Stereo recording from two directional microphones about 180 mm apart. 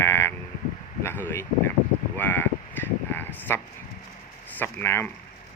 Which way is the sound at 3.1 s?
10° left (ahead or behind).